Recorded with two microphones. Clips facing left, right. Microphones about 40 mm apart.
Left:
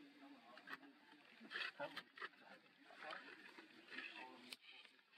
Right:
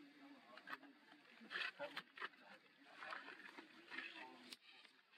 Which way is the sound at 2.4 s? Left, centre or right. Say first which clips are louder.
Even; centre.